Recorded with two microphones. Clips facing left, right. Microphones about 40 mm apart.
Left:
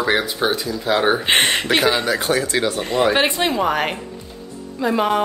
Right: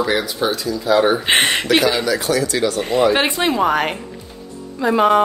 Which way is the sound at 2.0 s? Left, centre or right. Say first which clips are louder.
Right 1 dB; left.